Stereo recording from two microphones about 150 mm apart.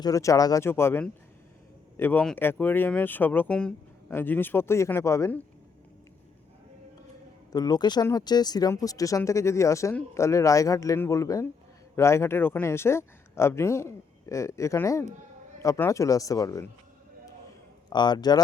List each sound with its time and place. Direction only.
0.0 s speech: 20° left (ahead or behind)
7.5 s speech: 25° left (ahead or behind)
17.8 s speech: 30° left (ahead or behind)